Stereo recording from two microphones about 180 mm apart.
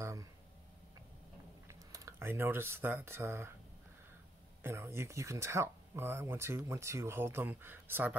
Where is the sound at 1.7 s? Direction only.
15° right (ahead or behind).